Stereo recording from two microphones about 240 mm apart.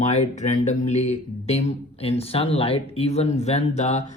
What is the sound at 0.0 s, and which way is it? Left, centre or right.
Speech, left.